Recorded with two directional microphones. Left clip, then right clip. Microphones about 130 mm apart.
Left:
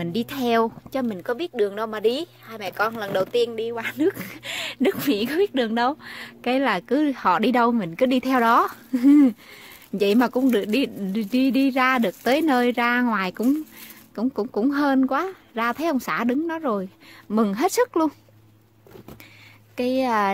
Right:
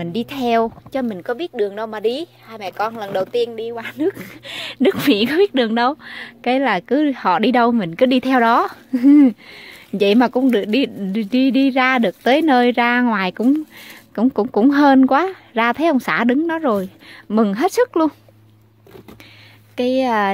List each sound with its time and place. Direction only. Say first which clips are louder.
0.0 s speech: right 4 dB; 5° right (ahead or behind)
4.5 s speech: right 1 dB; 20° right (ahead or behind)
5.0 s a woman's voice: right 7 dB; 50° right (ahead or behind); by 5.9 s 30° right (ahead or behind)
6.0 s speech: right 6 dB; 15° right (ahead or behind)
14.1 s speech: right 8 dB; 35° right (ahead or behind)
17.3 s speech: right 5 dB; 20° right (ahead or behind)
19.8 s speech: right 5 dB; 15° right (ahead or behind)